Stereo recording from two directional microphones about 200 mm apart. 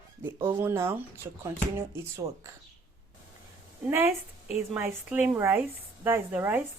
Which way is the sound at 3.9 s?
10° right (ahead or behind).